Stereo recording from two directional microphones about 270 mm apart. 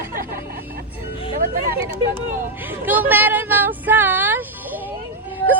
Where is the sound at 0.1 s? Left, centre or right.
Right.